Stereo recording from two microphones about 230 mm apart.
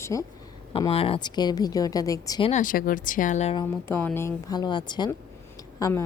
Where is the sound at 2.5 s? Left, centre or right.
Left.